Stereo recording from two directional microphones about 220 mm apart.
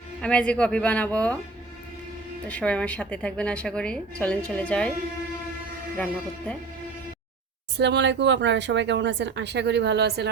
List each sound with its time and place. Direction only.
0.2 s a woman's voice: 5° left (ahead or behind)
2.5 s a woman's voice: 5° left (ahead or behind)
6.0 s a woman's voice: 5° left (ahead or behind)
7.8 s speech: 50° right (ahead or behind)